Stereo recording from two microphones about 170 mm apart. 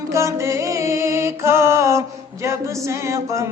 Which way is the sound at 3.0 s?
15° right (ahead or behind).